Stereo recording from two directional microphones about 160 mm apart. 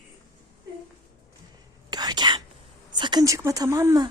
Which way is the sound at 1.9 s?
25° right (ahead or behind).